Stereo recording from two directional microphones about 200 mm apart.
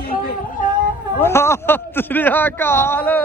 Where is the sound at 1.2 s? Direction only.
15° left (ahead or behind).